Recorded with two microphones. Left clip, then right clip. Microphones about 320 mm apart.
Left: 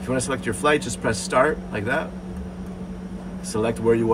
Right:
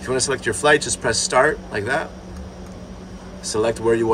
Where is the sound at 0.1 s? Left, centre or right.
Centre.